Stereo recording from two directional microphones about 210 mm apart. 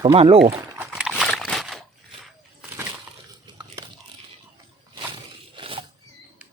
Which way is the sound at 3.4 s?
20° right (ahead or behind).